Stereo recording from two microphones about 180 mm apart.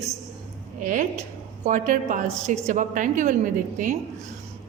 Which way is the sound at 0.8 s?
45° right (ahead or behind).